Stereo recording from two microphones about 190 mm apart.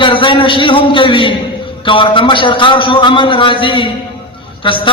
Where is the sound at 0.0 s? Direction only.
25° left (ahead or behind).